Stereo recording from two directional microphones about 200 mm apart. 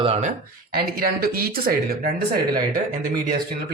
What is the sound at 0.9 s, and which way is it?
Speech, 50° right (ahead or behind).